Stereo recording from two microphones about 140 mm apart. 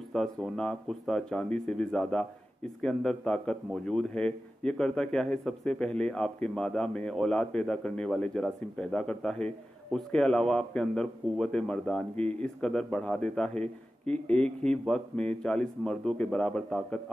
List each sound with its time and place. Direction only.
0.1 s a man's voice: centre (ahead or behind)